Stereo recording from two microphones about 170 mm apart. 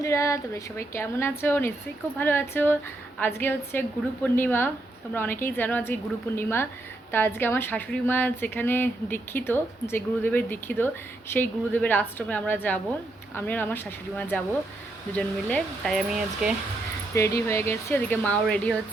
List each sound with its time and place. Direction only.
0.0 s speech: 20° left (ahead or behind); by 16.5 s centre (ahead or behind)
17.2 s speech: 15° left (ahead or behind)